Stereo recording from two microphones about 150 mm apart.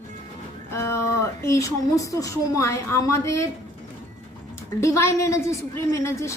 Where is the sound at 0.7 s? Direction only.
15° left (ahead or behind).